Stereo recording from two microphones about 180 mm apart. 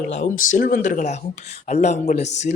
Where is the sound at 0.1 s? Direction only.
45° left (ahead or behind).